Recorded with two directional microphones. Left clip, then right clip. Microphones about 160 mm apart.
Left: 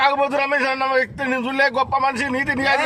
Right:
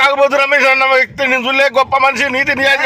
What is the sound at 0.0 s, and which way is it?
A man's voice, 15° right (ahead or behind).